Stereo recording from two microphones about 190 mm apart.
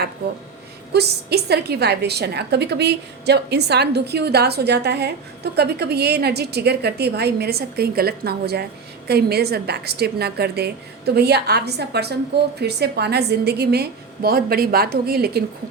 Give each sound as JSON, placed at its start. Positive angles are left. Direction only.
{"t": 0.9, "sound": "a woman's voice", "side_deg": -60}